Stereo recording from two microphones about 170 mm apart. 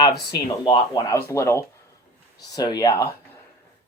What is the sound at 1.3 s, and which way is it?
Speech, 15° left (ahead or behind).